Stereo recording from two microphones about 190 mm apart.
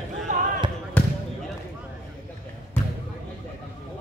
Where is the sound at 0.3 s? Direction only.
40° right (ahead or behind).